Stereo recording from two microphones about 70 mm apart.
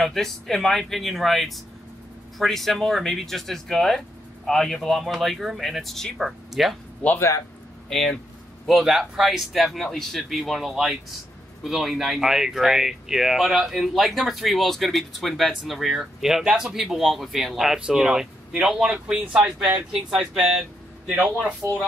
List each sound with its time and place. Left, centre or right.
0.0 s speech: centre
7.2 s speech: left
7.9 s speech: centre
8.6 s speech: centre
21.6 s speech: right